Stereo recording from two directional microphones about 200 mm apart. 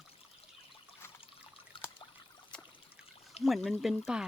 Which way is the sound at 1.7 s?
25° left (ahead or behind).